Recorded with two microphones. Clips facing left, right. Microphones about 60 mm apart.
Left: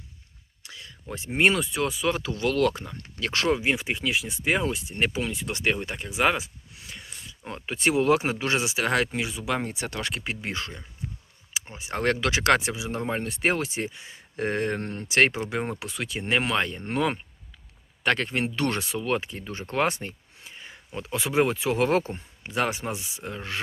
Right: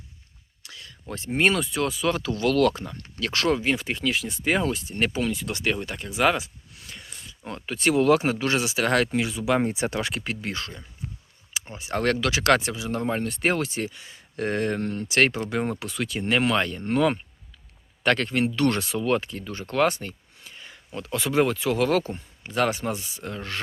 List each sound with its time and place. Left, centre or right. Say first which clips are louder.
0.6 s speech: even; centre
6.9 s a sound: even; centre
7.5 s speech: right 2 dB; centre
9.4 s speech: right 6 dB; centre
9.6 s speech: right 6 dB; right
10.2 s speech: right 1 dB; centre
11.5 s a sound: right 1 dB; centre
11.9 s speech: right 1 dB; centre
12.2 s speech: even; left
18.9 s speech: right 3 dB; centre; by 22.2 s left
22.4 s speech: right 3 dB; centre